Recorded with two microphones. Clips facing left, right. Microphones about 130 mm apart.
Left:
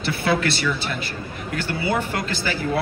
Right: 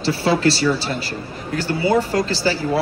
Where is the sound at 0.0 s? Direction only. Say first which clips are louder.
Right 5 dB; 30° right (ahead or behind).